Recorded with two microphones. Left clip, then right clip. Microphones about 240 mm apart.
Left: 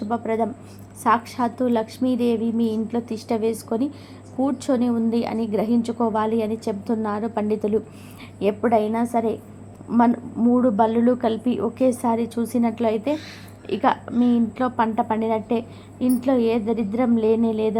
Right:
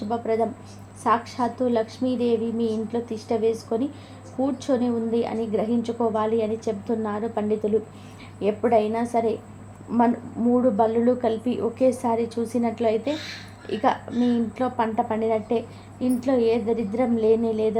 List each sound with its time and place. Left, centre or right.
0.1 s a woman's voice: centre